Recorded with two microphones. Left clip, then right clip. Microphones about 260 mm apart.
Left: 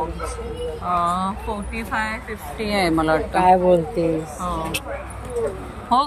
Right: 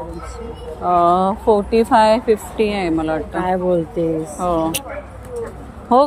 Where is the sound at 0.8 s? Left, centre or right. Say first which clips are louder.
Right 8 dB; centre.